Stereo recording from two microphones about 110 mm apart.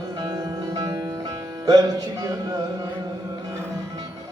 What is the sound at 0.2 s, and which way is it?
Music, 40° right (ahead or behind).